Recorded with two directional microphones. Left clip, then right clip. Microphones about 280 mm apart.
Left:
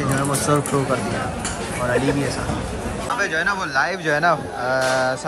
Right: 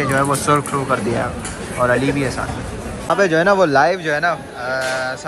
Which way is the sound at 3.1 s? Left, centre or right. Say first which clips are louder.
Right 7 dB; centre.